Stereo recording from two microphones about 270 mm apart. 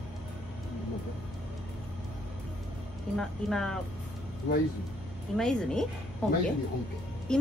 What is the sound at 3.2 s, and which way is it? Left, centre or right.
Speech, centre.